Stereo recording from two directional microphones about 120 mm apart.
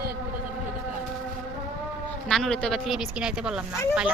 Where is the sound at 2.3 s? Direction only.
5° left (ahead or behind).